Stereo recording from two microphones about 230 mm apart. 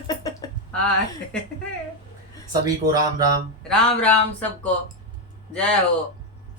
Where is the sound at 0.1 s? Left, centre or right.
Centre.